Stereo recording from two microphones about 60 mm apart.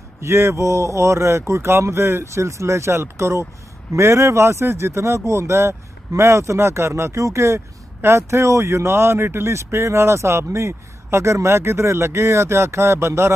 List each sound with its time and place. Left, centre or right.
0.2 s speech: right